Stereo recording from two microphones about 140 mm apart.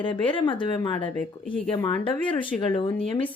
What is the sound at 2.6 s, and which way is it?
Speech, 40° left (ahead or behind).